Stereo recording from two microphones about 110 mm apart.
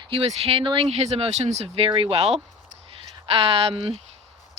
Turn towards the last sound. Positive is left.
turn(degrees=-60)  # may be behind; listen again after turning